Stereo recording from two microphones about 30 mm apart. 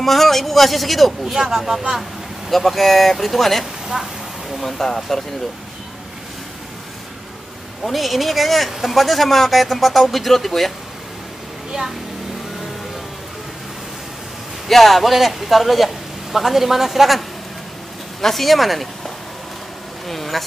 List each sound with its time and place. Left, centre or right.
0.0 s speech: centre
1.2 s speech: centre
2.5 s speech: centre
3.9 s a sound: centre
4.6 s speech: centre
7.8 s speech: centre
14.7 s a man's voice: centre
18.2 s speech: centre
20.1 s speech: centre